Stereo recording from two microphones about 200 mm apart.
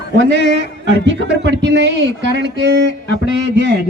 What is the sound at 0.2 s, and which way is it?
A man's voice, 60° right (ahead or behind).